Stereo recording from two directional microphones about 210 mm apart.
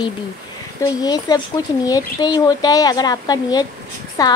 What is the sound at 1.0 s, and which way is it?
A woman's voice, 20° left (ahead or behind).